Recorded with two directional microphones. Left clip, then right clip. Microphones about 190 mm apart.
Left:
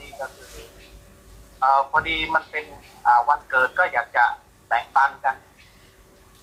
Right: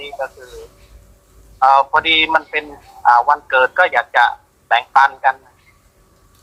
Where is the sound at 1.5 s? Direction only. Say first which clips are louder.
Right 7 dB; 45° right (ahead or behind).